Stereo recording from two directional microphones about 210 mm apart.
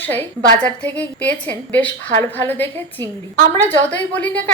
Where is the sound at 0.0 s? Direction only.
10° left (ahead or behind).